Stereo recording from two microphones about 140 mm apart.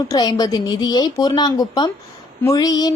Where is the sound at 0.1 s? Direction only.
30° left (ahead or behind).